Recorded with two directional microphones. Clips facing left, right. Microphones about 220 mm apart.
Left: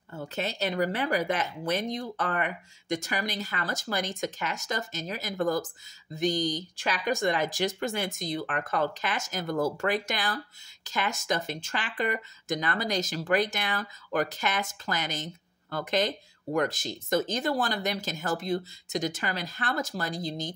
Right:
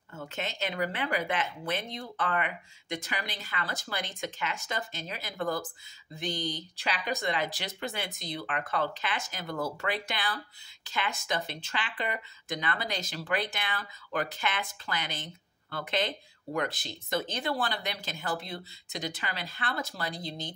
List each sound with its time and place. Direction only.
0.1 s speech: 35° left (ahead or behind)